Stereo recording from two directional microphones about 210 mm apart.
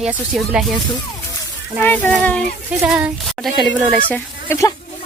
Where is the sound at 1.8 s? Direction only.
10° left (ahead or behind).